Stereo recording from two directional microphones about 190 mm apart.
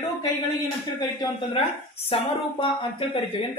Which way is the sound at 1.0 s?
20° left (ahead or behind).